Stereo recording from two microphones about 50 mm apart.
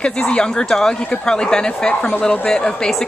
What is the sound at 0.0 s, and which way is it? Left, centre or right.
A woman's voice, centre.